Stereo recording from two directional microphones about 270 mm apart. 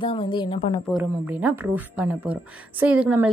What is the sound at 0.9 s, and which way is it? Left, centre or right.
A woman's voice, centre.